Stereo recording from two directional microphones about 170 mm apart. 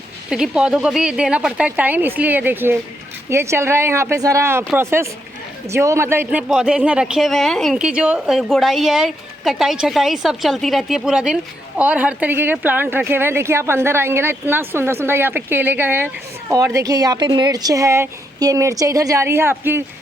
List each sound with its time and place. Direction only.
0.3 s a woman's voice: 5° right (ahead or behind)